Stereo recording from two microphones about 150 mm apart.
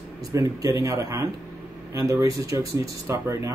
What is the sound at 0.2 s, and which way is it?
A man's voice, 20° right (ahead or behind).